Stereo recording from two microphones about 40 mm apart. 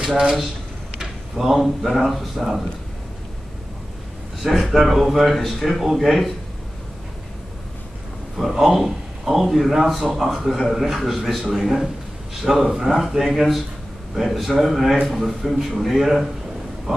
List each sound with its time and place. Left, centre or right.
1.3 s a man's voice: centre
4.4 s a man's voice: centre
8.4 s a man's voice: centre